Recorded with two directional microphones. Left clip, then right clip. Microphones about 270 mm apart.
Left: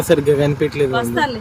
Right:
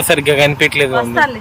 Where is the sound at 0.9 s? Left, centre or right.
Centre.